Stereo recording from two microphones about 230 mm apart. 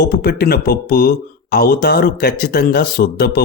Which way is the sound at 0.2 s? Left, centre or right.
Left.